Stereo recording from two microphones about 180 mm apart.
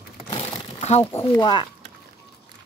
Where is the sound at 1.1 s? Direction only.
25° left (ahead or behind).